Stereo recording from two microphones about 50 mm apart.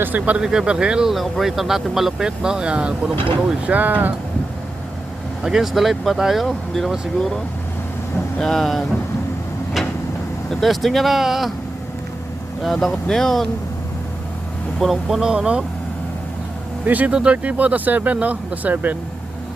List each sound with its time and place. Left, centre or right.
0.2 s speech: right
1.1 s speech: centre; by 2.9 s right
3.7 s speech: right
5.4 s speech: centre
8.4 s speech: centre
10.5 s speech: centre
12.6 s speech: centre
14.8 s speech: centre
15.2 s speech: centre
16.8 s speech: right
17.1 s speech: right